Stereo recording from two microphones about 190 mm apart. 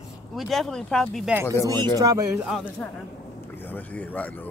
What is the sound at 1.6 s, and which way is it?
Speech, 25° right (ahead or behind).